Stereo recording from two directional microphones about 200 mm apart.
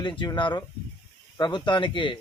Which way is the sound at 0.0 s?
25° left (ahead or behind).